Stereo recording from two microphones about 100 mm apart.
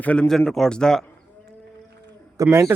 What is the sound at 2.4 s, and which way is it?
Speech, 25° right (ahead or behind).